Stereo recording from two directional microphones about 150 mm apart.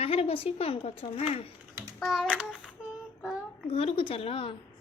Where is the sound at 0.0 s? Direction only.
40° left (ahead or behind).